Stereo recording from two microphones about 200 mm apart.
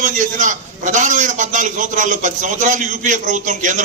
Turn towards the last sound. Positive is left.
turn(degrees=-40)  # may be behind; listen again after turning